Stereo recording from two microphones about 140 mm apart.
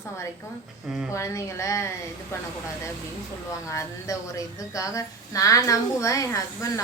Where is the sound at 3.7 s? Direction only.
25° left (ahead or behind).